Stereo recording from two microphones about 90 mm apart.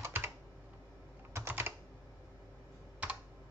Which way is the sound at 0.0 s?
25° right (ahead or behind).